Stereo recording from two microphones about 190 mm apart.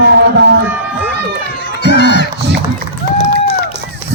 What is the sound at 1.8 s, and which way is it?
Crowd, 65° left (ahead or behind).